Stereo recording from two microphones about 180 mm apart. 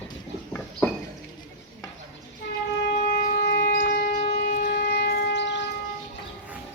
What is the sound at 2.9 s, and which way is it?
Shofar, 55° left (ahead or behind).